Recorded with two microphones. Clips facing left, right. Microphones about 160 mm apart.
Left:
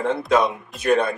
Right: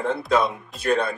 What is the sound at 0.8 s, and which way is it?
Speech, 20° left (ahead or behind).